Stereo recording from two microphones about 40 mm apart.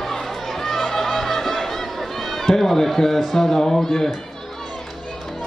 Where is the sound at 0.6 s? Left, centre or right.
Centre.